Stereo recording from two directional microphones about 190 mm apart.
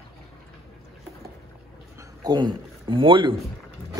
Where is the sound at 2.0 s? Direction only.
20° right (ahead or behind).